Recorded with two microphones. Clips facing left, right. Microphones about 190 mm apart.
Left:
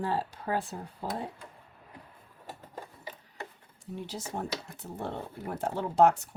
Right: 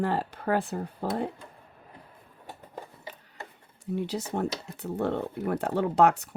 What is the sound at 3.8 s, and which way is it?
Speech, 65° right (ahead or behind).